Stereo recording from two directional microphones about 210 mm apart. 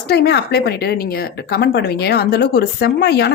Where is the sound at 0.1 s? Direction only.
50° left (ahead or behind).